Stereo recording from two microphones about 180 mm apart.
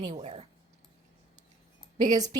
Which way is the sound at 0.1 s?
35° right (ahead or behind).